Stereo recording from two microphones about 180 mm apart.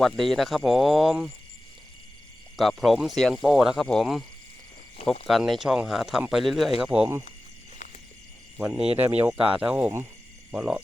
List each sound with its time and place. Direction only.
0.0 s speech: centre (ahead or behind)
2.6 s speech: centre (ahead or behind)
7.8 s a sound: 45° left (ahead or behind)
8.5 s speech: 15° right (ahead or behind)